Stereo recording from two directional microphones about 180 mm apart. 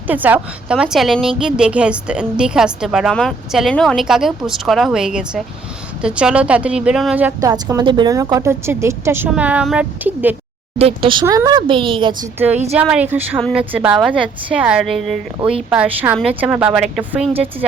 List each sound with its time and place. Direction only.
0.1 s a woman's voice: 10° right (ahead or behind)
7.4 s a woman's voice: 20° right (ahead or behind)
10.8 s speech: 30° right (ahead or behind)
12.7 s a woman's voice: 5° right (ahead or behind)